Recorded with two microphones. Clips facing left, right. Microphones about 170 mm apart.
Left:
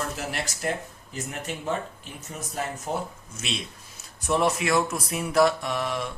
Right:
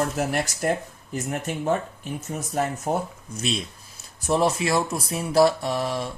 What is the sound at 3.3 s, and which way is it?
Speech, 40° right (ahead or behind).